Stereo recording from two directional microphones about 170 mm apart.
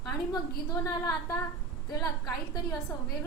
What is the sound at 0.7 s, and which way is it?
Speech, 15° left (ahead or behind).